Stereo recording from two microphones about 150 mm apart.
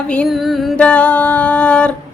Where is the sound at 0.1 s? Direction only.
5° left (ahead or behind).